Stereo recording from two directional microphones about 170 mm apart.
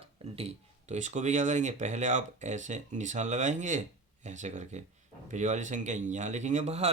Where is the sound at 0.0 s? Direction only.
35° right (ahead or behind).